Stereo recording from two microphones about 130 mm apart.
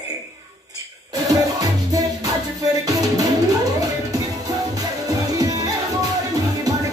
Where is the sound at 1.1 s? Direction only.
30° right (ahead or behind).